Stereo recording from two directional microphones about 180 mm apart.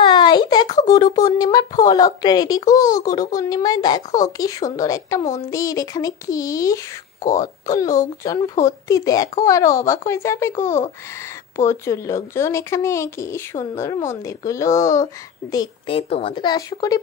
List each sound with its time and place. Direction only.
0.0 s speech: 25° left (ahead or behind)
16.0 s speech: 35° left (ahead or behind)